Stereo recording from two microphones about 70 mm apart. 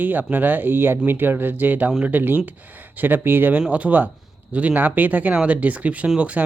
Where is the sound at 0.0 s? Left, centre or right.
Right.